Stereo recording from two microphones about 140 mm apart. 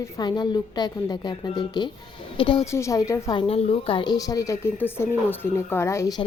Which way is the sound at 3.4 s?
45° left (ahead or behind).